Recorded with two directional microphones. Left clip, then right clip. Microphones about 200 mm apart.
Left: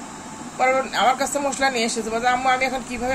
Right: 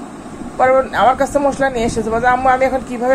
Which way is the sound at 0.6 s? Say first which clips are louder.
Right 7 dB; 5° right (ahead or behind).